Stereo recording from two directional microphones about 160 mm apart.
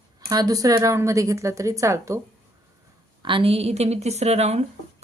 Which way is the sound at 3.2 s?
35° right (ahead or behind).